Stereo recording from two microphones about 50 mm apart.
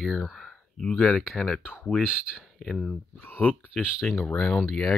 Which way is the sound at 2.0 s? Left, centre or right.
Centre.